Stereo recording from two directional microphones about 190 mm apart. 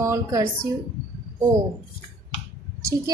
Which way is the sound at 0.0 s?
15° right (ahead or behind).